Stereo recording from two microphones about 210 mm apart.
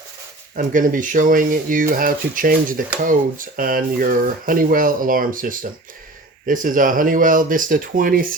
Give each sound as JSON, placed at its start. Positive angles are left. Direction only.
{"t": 0.5, "sound": "speech", "side_deg": -40}